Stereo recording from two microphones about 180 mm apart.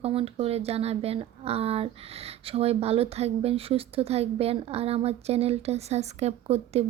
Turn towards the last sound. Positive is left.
turn(degrees=-35)  # may be behind; listen again after turning